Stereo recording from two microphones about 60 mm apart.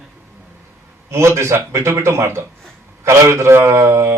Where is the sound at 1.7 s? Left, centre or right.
Right.